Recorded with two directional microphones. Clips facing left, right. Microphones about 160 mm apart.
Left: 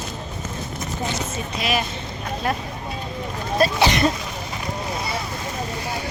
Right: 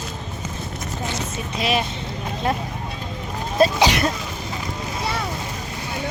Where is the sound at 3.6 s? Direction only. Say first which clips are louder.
Right 2 dB; 15° right (ahead or behind).